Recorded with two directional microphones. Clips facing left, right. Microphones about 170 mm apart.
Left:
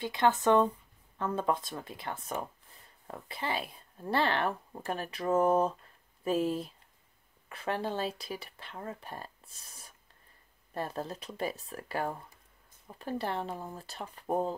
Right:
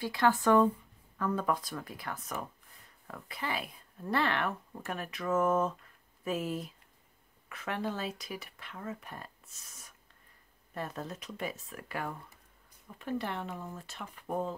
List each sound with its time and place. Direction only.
0.0 s speech: 20° left (ahead or behind); by 14.5 s 35° left (ahead or behind)